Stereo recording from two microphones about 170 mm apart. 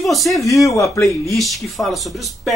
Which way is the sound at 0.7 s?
20° left (ahead or behind).